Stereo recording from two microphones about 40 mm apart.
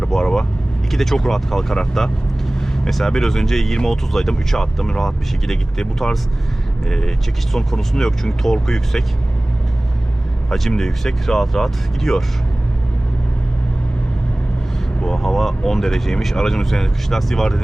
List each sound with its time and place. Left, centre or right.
0.2 s vehicle: centre
0.9 s speech: centre
6.8 s speech: centre
10.5 s speech: centre
15.0 s speech: centre